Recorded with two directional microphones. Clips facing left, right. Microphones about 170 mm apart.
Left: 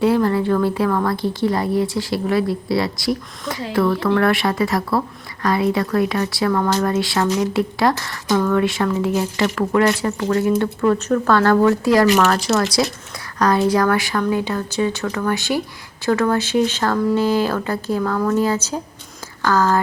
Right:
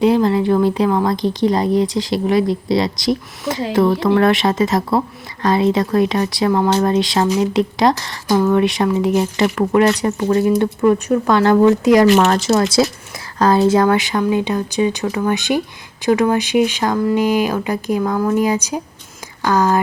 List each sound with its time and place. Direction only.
0.0 s speech: 20° right (ahead or behind)
12.1 s speech: 35° right (ahead or behind)
13.4 s speech: 25° right (ahead or behind)